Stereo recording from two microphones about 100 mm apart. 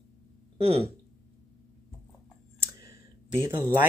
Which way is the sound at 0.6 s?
90° right.